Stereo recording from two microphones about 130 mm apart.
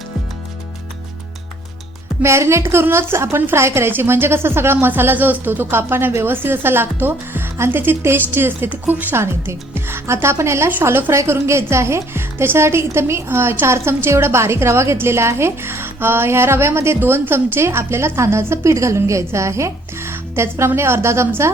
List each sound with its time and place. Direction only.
2.2 s a woman's voice: 20° right (ahead or behind)